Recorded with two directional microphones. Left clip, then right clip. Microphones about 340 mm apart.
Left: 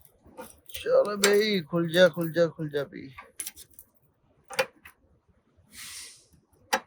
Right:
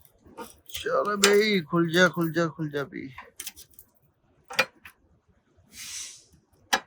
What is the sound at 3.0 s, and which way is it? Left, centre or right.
Typing, right.